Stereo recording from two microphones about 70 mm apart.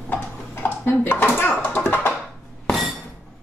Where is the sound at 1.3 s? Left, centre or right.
Left.